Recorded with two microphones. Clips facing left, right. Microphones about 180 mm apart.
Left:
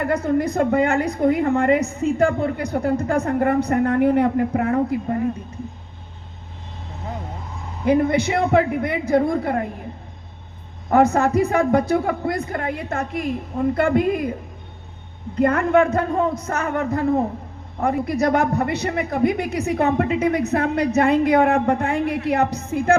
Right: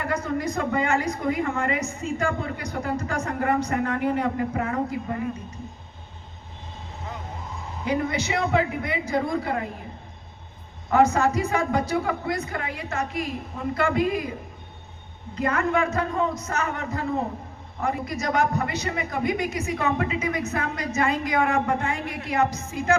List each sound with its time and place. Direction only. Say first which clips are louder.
0.0 s a woman's voice: left 7 dB; 55° left (ahead or behind)
5.0 s a man's voice: left 7 dB; 40° left (ahead or behind)
7.9 s a man's voice: left 8 dB; 55° left (ahead or behind)
10.8 s a woman's voice: left 3 dB; 55° left (ahead or behind)
15.4 s a woman's voice: left 7 dB; 55° left (ahead or behind)